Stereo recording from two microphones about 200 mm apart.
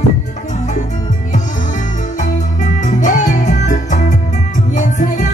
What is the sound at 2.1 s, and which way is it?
Music, 40° left (ahead or behind).